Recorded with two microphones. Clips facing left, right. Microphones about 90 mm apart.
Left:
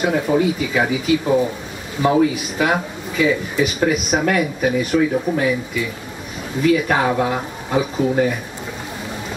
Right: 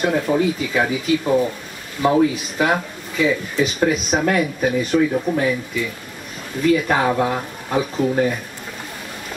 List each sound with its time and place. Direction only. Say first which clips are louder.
0.0 s speech: left 1 dB; 5° left (ahead or behind)
6.7 s speech: even; 5° left (ahead or behind)